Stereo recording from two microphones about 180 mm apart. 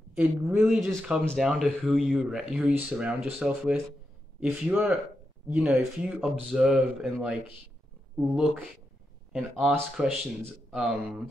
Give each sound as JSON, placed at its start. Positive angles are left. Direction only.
{"t": 0.1, "sound": "speech", "side_deg": -5}
{"t": 9.3, "sound": "speech", "side_deg": -5}